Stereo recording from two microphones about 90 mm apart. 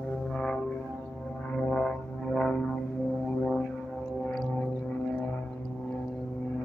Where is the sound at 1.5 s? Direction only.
10° left (ahead or behind).